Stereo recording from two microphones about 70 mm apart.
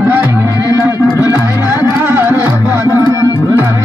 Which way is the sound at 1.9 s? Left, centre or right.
Right.